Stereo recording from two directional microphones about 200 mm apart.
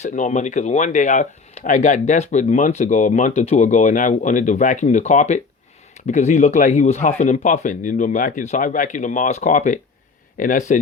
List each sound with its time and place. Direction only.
0.0 s speech: 35° left (ahead or behind)